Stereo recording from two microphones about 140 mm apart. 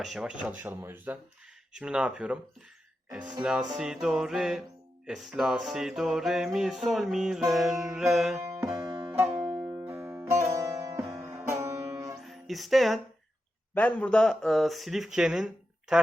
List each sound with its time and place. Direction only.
0.0 s speech: 5° right (ahead or behind)
3.4 s music: 5° right (ahead or behind)
9.1 s music: 15° right (ahead or behind)
12.2 s music: centre (ahead or behind)